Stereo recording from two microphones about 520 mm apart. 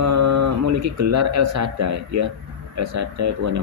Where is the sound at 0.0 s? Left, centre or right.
Right.